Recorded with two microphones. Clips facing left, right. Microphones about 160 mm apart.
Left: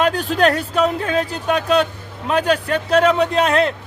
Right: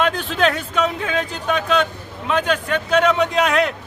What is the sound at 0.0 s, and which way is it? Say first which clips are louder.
Speech: left 3 dB; 40° left (ahead or behind).